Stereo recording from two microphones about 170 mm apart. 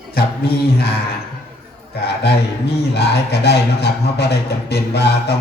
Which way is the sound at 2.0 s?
80° left.